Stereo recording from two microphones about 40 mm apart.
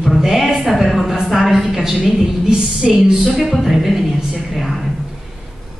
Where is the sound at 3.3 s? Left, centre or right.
Centre.